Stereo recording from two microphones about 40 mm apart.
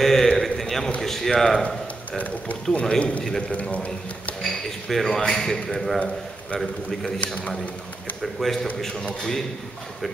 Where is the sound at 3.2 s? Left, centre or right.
Centre.